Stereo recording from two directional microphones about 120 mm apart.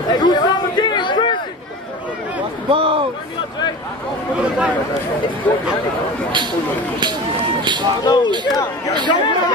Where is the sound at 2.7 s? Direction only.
50° right (ahead or behind).